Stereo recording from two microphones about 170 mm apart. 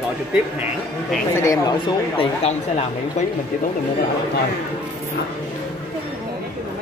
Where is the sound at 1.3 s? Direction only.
20° left (ahead or behind).